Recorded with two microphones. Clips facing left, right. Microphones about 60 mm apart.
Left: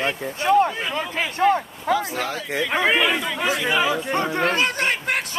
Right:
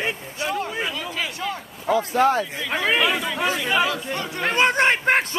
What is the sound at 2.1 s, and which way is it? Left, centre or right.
Speech, right.